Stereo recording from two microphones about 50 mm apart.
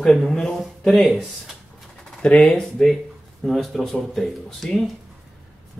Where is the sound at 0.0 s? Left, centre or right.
Centre.